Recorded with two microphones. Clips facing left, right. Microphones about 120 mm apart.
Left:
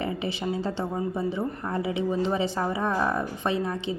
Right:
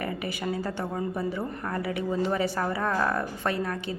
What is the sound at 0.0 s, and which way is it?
Speech, 25° left (ahead or behind).